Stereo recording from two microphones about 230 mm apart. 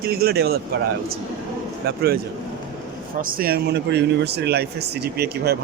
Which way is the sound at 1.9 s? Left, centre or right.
Right.